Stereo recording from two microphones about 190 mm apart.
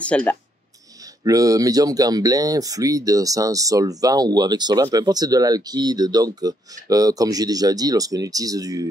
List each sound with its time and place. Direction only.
0.0 s speech: 5° left (ahead or behind)
1.0 s speech: 20° right (ahead or behind)